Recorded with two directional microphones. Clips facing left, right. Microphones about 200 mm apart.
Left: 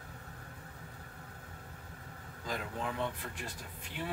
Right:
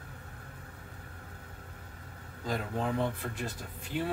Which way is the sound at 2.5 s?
35° right (ahead or behind).